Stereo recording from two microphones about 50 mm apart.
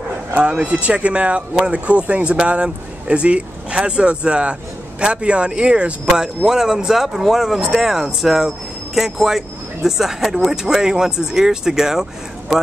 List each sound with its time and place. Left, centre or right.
0.4 s speech: right